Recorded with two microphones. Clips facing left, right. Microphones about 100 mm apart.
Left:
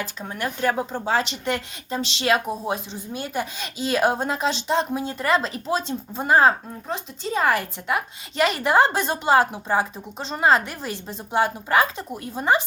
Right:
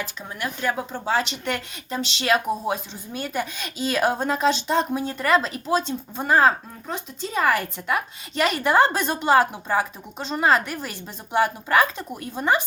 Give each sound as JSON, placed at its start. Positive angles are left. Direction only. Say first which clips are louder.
{"t": 0.0, "sound": "speech", "louder": "left 2 dB", "side_deg": 40}